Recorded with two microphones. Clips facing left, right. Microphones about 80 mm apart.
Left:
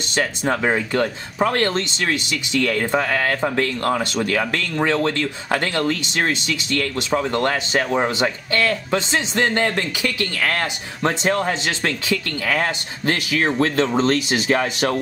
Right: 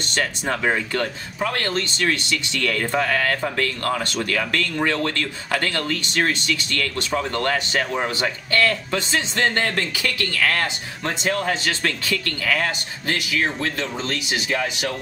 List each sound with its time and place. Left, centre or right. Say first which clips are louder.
0.1 s speech: left 3 dB; centre
1.4 s speech: left 5 dB; left
11.0 s speech: left 4 dB; left
12.4 s speech: left 2 dB; left